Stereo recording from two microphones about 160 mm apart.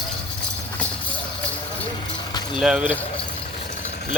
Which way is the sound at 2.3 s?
25° left (ahead or behind).